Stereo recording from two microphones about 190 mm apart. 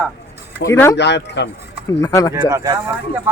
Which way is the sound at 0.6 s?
15° left (ahead or behind).